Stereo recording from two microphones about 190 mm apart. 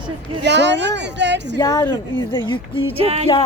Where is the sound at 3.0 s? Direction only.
35° right (ahead or behind).